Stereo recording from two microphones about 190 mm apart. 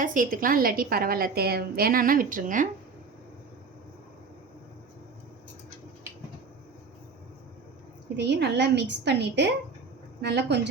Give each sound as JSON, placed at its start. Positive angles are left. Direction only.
{"t": 0.0, "sound": "a woman's voice", "side_deg": -45}
{"t": 8.1, "sound": "a woman's voice", "side_deg": -65}